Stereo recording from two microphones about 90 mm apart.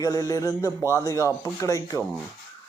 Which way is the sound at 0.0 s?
40° left (ahead or behind).